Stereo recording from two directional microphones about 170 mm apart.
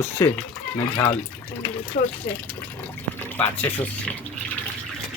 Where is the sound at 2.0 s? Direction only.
55° left (ahead or behind).